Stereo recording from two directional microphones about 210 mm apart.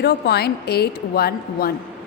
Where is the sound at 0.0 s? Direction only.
50° left (ahead or behind).